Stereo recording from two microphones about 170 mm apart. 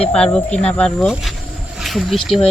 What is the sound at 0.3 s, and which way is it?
A woman's voice, 5° left (ahead or behind).